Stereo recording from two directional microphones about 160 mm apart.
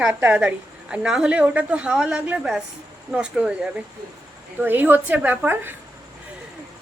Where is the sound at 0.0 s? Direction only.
10° right (ahead or behind).